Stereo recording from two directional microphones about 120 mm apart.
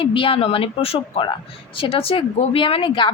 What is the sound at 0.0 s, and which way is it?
A woman's voice, 50° left (ahead or behind).